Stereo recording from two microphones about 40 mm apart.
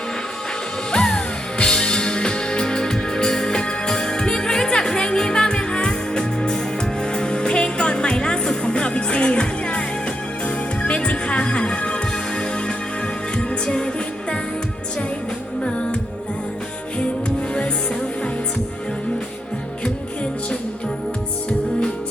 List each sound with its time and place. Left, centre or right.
0.9 s music: centre
13.3 s music: left
15.6 s music: left
17.0 s music: left